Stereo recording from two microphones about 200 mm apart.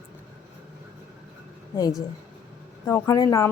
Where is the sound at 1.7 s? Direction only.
20° left (ahead or behind).